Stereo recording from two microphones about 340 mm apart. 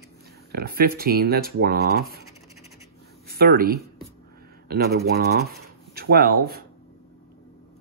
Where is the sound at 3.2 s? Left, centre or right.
Right.